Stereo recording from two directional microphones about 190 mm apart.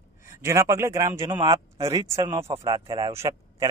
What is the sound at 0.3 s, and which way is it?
A man's voice, 15° right (ahead or behind).